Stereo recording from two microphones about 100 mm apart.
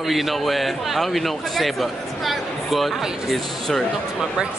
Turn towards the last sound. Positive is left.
turn(degrees=0)  # may be behind; listen again after turning